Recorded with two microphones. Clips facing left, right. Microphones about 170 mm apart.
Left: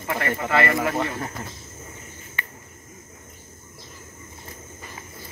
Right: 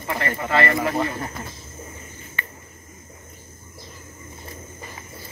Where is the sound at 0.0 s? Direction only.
5° left (ahead or behind).